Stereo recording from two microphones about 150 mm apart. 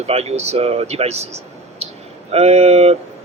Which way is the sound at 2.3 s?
45° right (ahead or behind).